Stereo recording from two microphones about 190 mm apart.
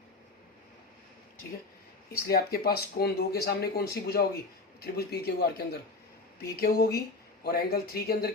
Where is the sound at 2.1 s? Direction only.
55° left (ahead or behind).